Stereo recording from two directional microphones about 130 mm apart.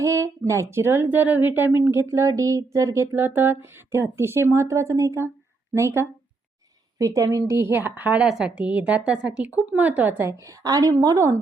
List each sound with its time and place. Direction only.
0.0 s a woman's voice: 25° right (ahead or behind)